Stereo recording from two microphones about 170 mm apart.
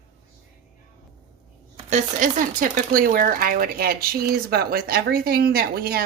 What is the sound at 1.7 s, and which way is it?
Speech, 45° right (ahead or behind).